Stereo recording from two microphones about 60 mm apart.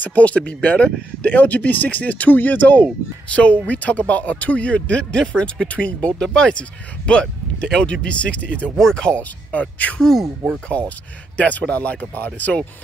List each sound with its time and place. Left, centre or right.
0.0 s speech: left
8.7 s speech: centre
9.5 s speech: left
9.9 s speech: centre
11.3 s speech: left